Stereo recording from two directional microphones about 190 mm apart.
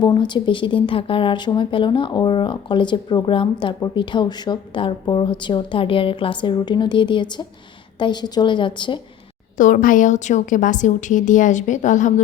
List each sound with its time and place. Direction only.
0.0 s speech: 25° left (ahead or behind)
9.6 s a woman's voice: 45° left (ahead or behind)